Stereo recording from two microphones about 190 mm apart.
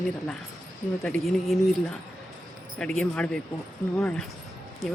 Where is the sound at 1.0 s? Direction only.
Centre (ahead or behind).